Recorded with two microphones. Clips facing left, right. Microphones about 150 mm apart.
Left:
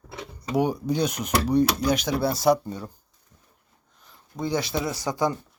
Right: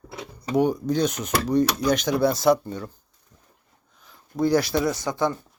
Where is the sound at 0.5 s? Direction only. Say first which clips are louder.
Right 2 dB; 10° left (ahead or behind).